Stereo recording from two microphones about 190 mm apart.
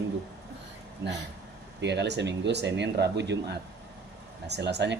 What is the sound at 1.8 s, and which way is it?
Speech, 65° right (ahead or behind).